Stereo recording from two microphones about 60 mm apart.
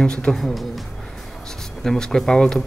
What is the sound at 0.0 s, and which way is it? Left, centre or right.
Speech, centre.